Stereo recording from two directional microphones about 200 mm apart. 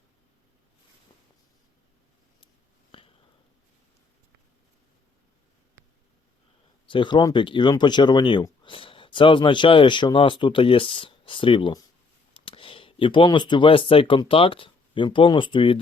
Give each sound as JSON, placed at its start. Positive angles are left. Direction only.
{"t": 2.9, "sound": "sniff", "side_deg": 25}
{"t": 6.8, "sound": "speech", "side_deg": 25}